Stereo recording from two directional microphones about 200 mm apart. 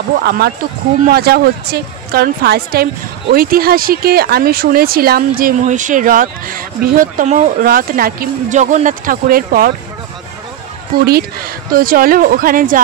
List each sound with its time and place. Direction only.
0.2 s speech: 55° right (ahead or behind)
11.1 s speech: 50° right (ahead or behind)